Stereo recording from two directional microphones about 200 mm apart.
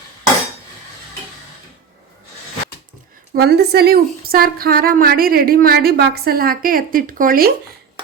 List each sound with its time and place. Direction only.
3.3 s a woman's voice: 55° right (ahead or behind)